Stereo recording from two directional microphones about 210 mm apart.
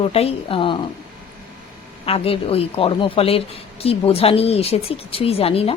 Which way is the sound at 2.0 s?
30° left (ahead or behind).